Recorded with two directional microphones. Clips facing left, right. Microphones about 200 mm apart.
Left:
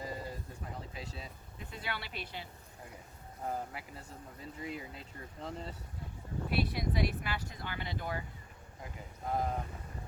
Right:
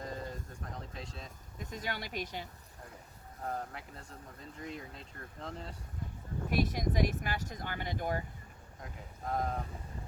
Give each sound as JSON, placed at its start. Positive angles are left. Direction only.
{"t": 0.0, "sound": "a sound", "side_deg": 5}
{"t": 1.5, "sound": "speech", "side_deg": -45}
{"t": 3.4, "sound": "speech", "side_deg": 5}
{"t": 6.5, "sound": "speech", "side_deg": -45}
{"t": 8.8, "sound": "speech", "side_deg": 0}